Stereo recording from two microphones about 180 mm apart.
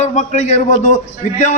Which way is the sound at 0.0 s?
40° left (ahead or behind).